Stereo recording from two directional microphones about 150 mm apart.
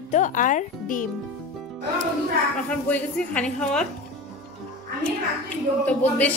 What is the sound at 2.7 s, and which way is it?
A woman's voice, 10° left (ahead or behind).